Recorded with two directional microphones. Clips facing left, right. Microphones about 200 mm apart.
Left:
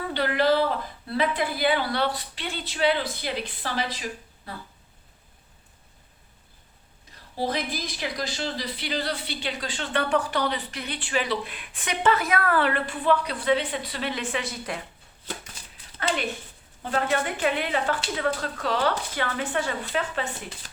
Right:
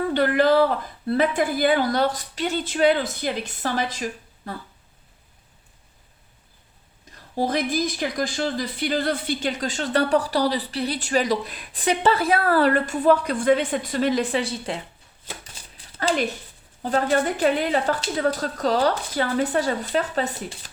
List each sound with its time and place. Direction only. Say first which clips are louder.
0.1 s speech: right 3 dB; 50° right (ahead or behind)
7.3 s speech: right 6 dB; 45° right (ahead or behind); by 14.8 s 30° right (ahead or behind)
16.0 s a woman's voice: right 5 dB; 35° right (ahead or behind)